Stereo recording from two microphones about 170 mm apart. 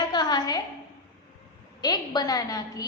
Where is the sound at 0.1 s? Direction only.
25° left (ahead or behind).